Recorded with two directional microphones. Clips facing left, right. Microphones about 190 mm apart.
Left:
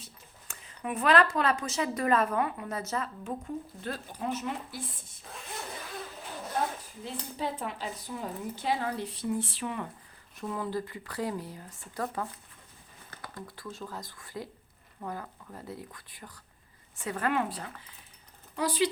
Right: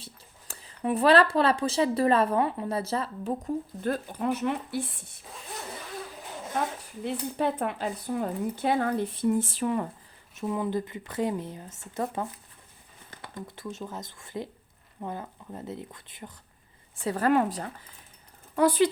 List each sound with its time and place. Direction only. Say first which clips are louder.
0.0 s speech: right 3 dB; 30° right (ahead or behind); by 5.2 s 65° right (ahead or behind)
7.0 s speech: right 7 dB; 60° right (ahead or behind); by 9.9 s 40° right (ahead or behind)
10.4 s speech: right 5 dB; 20° right (ahead or behind)
17.0 s speech: right 6 dB; 35° right (ahead or behind)
18.5 s speech: right 6 dB; 55° right (ahead or behind)